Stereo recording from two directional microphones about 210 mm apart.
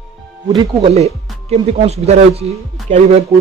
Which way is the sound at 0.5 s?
25° right (ahead or behind).